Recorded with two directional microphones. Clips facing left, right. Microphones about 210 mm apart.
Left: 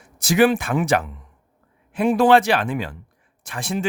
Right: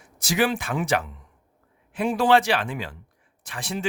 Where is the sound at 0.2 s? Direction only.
55° left (ahead or behind).